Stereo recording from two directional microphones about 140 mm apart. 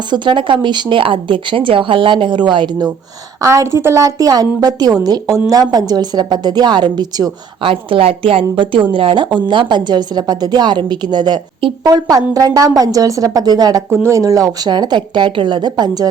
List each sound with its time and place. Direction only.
0.1 s a woman's voice: 35° right (ahead or behind)
3.4 s a woman's voice: 20° right (ahead or behind)